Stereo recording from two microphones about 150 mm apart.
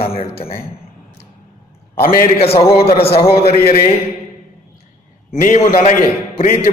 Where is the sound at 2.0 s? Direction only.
75° left (ahead or behind).